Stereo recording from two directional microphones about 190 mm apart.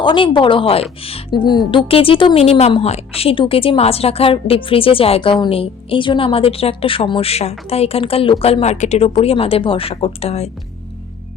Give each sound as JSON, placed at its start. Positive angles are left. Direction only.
{"t": 0.0, "sound": "a woman's voice", "side_deg": 25}